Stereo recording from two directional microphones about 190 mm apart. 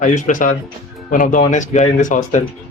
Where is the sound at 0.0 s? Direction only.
40° left (ahead or behind).